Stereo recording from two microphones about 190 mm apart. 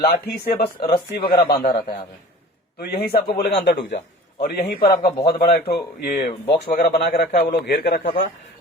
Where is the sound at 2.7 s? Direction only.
55° left (ahead or behind).